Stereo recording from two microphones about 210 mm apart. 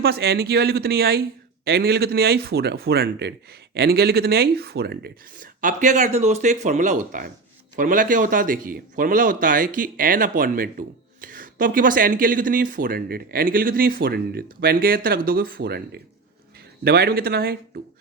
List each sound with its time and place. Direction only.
0.0 s a man's voice: 50° right (ahead or behind)